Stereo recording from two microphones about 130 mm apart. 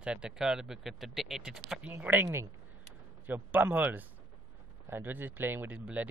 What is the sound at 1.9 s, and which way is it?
Speech, 15° right (ahead or behind).